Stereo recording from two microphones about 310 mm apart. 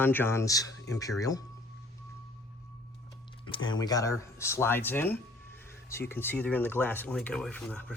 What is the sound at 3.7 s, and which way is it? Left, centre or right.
Speech, centre.